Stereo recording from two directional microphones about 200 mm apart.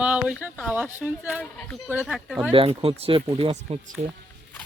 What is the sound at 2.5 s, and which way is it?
Speech, 30° right (ahead or behind).